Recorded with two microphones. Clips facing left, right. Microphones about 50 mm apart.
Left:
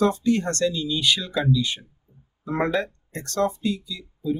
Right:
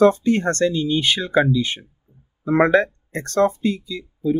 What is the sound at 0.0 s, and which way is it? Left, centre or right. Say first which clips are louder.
Speech: right 6 dB; right.